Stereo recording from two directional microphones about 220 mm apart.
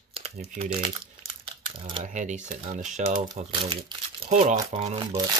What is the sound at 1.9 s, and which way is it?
Speech, 35° right (ahead or behind).